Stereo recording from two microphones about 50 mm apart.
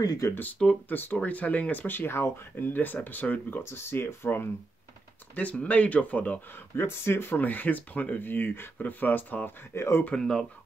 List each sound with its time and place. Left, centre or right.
0.3 s speech: left
3.6 s speech: left
5.3 s speech: left
6.8 s speech: left
7.3 s speech: left
9.8 s speech: left
10.1 s speech: centre